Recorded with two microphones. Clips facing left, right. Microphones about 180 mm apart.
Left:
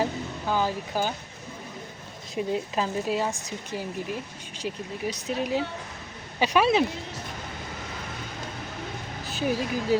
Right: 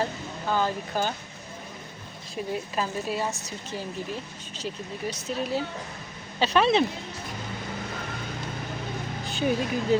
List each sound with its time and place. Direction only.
0.0 s a sound: 10° left (ahead or behind)
2.3 s speech: 15° left (ahead or behind)
4.5 s speech: 15° left (ahead or behind)
9.3 s speech: 5° left (ahead or behind)